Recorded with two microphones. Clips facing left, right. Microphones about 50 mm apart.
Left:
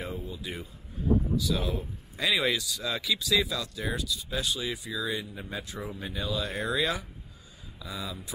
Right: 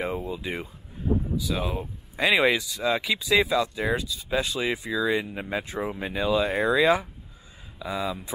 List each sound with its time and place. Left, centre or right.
0.1 s speech: right
1.3 s speech: right
5.5 s speech: right
5.8 s speech: right